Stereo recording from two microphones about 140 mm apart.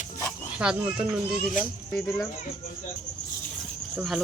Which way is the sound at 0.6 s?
5° right (ahead or behind).